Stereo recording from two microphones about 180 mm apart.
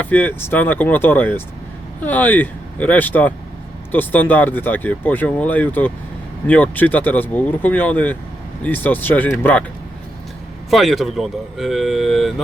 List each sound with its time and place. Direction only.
0.0 s speech: 10° left (ahead or behind)
10.7 s speech: centre (ahead or behind)